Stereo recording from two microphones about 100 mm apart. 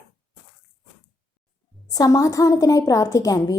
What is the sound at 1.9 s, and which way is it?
A woman's voice, 40° left (ahead or behind).